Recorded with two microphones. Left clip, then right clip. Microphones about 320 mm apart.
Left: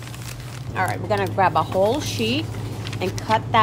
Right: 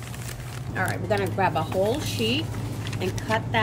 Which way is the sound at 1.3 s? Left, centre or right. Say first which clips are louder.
Left 8 dB; centre.